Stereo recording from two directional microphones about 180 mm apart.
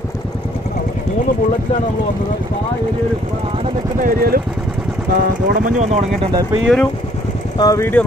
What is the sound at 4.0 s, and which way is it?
Speech, 55° right (ahead or behind).